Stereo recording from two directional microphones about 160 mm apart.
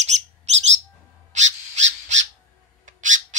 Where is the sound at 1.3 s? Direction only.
45° right (ahead or behind).